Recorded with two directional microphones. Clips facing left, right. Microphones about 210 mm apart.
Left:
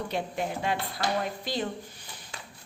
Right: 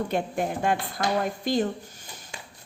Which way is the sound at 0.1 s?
50° right (ahead or behind).